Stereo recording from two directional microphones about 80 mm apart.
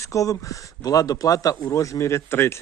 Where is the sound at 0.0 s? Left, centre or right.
Left.